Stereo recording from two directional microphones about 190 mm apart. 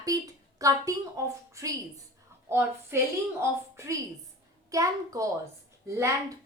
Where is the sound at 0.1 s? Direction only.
20° right (ahead or behind).